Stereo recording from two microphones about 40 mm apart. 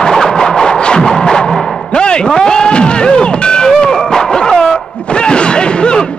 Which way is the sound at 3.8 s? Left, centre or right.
Centre.